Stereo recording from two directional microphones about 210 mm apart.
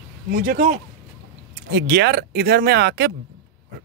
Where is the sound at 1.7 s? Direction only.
55° right (ahead or behind).